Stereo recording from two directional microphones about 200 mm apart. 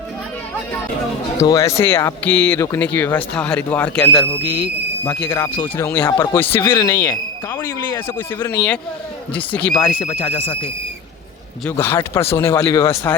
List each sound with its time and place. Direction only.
1.4 s speech: 15° left (ahead or behind)
5.3 s speech: 10° left (ahead or behind)
10.3 s a man's voice: 30° left (ahead or behind)
11.6 s speech: 10° left (ahead or behind)